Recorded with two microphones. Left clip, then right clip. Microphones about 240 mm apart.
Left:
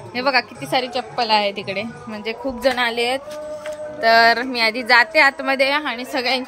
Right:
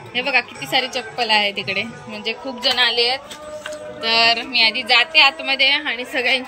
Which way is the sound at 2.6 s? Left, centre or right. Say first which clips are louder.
Right 2 dB; left.